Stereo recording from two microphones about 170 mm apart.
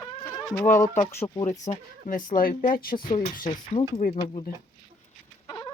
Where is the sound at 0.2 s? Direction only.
15° left (ahead or behind).